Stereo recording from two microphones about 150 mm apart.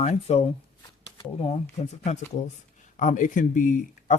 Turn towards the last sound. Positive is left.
turn(degrees=60)  # may be behind; listen again after turning